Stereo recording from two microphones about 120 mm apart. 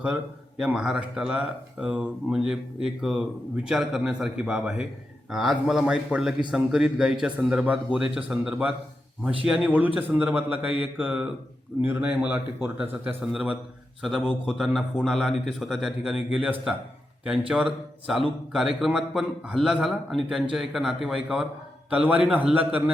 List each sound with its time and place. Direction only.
0.6 s a man's voice: 5° right (ahead or behind)